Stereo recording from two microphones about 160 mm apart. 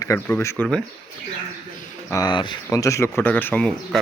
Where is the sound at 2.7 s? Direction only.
20° left (ahead or behind).